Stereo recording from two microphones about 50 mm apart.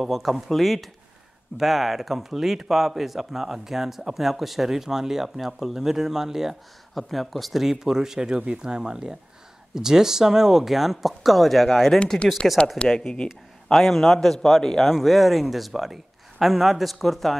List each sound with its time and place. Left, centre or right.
0.0 s speech: centre
13.7 s speech: centre
15.0 s speech: centre